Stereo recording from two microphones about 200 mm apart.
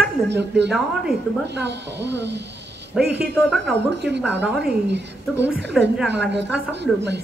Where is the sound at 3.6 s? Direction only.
60° right (ahead or behind).